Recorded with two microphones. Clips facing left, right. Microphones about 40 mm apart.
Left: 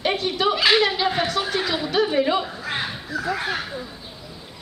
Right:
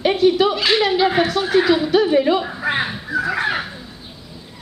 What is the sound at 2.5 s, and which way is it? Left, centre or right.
Crow, right.